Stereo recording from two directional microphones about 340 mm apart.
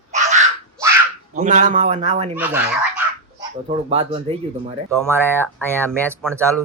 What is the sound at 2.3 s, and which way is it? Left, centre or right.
Speech, centre.